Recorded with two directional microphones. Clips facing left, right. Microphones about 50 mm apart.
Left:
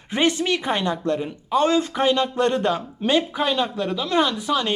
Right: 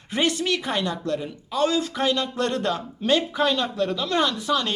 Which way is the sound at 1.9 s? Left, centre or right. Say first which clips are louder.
Left 4 dB; left.